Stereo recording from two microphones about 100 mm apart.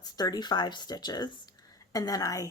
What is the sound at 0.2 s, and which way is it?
A woman's voice, 45° left (ahead or behind).